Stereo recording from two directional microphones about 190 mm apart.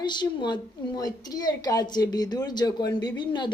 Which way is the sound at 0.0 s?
25° left (ahead or behind).